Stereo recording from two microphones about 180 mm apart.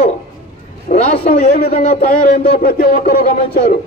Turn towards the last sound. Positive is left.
turn(degrees=55)  # may be behind; listen again after turning